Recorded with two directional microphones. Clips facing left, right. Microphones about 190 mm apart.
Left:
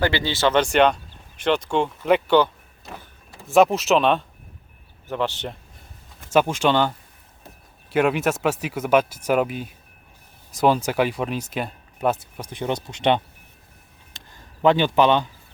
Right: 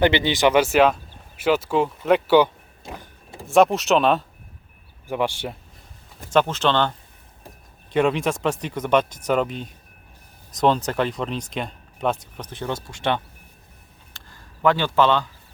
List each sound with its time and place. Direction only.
0.0 s speech: 20° right (ahead or behind); by 4.3 s centre (ahead or behind)
5.0 s speech: 10° right (ahead or behind)
6.3 s speech: 10° left (ahead or behind)
14.1 s a sound: 20° left (ahead or behind)